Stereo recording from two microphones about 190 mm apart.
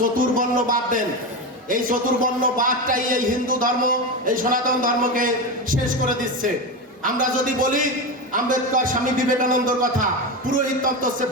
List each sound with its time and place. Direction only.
0.0 s a man's voice: 45° right (ahead or behind)
7.0 s a man's voice: 45° right (ahead or behind)